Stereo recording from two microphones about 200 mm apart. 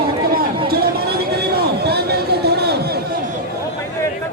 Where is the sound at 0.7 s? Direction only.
50° right (ahead or behind).